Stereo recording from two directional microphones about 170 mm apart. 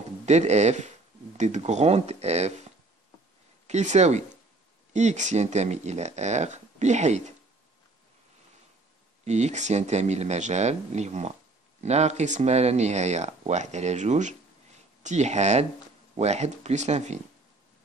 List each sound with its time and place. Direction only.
0.2 s speech: 40° right (ahead or behind)
3.6 s speech: 40° right (ahead or behind)
9.2 s speech: 40° right (ahead or behind)